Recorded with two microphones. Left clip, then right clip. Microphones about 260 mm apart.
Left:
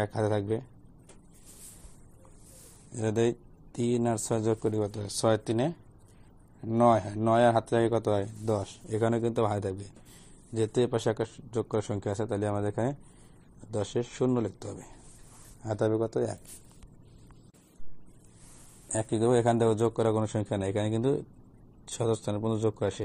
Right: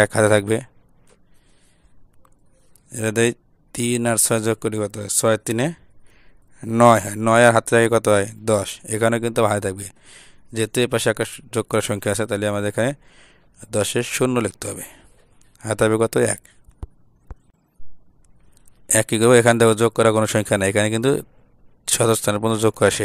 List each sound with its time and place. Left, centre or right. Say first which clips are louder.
0.0 s speech: right 14 dB; right
3.2 s speech: right 9 dB; right
19.0 s speech: right 11 dB; right